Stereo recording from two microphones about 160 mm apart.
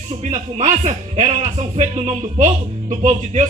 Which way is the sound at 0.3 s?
50° right (ahead or behind).